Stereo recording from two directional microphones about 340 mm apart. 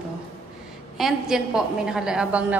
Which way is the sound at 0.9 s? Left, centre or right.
Centre.